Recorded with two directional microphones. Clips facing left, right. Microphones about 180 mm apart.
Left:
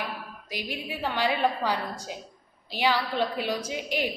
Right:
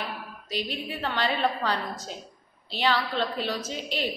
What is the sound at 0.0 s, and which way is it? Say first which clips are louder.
A woman's voice: even; 10° left (ahead or behind).